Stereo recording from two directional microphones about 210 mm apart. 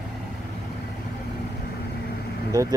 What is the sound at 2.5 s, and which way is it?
Speech, 15° right (ahead or behind).